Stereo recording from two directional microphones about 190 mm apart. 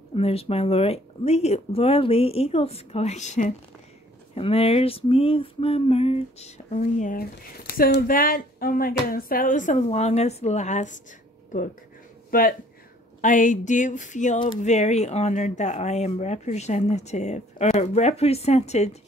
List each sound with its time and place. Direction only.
0.1 s speech: 30° left (ahead or behind)
12.3 s speech: 50° left (ahead or behind)